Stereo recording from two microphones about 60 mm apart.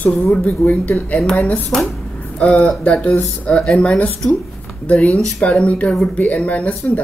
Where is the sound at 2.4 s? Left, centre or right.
Centre.